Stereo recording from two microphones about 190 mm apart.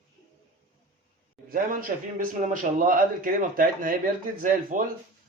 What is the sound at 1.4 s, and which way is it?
Speech, 45° right (ahead or behind).